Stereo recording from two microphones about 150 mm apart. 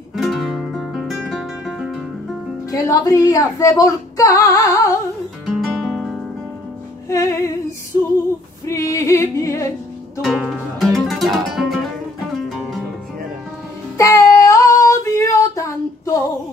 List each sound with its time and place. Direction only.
0.1 s music: centre (ahead or behind)
2.7 s speech: 25° left (ahead or behind)
5.5 s music: centre (ahead or behind)
7.1 s speech: 20° left (ahead or behind)
8.6 s music: 20° left (ahead or behind)
10.2 s music: centre (ahead or behind)
13.9 s female singing: 20° left (ahead or behind)